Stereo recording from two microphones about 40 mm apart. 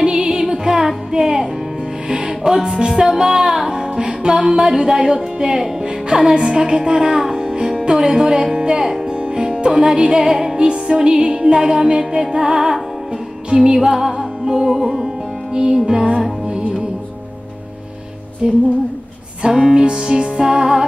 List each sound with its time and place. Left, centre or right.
0.0 s music: centre
7.8 s speech: centre
8.8 s music: centre
9.1 s music: right
13.7 s music: centre
18.4 s music: centre